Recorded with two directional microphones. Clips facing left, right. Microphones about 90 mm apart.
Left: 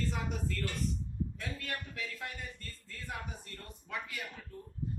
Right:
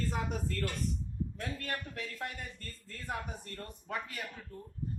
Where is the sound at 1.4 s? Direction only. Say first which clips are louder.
Right 2 dB; 45° right (ahead or behind).